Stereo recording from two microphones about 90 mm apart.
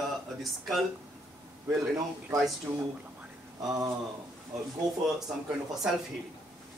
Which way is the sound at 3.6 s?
40° right (ahead or behind).